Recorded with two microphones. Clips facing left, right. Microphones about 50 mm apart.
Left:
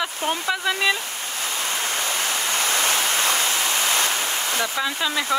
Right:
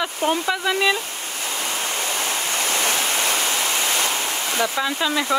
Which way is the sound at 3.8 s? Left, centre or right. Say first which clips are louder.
Even; right.